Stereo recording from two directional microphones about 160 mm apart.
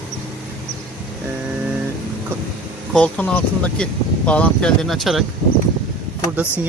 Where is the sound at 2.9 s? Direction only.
10° left (ahead or behind).